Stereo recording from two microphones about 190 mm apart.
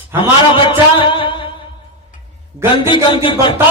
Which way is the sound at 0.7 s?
25° left (ahead or behind).